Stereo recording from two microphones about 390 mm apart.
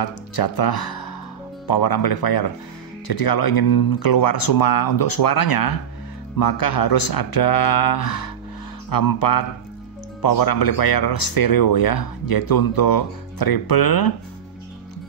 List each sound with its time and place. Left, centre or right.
0.0 s speech: left